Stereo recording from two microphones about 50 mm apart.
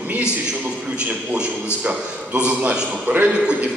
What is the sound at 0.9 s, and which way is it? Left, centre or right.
A man's voice, right.